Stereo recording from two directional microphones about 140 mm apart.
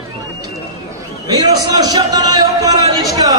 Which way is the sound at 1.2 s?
30° right (ahead or behind).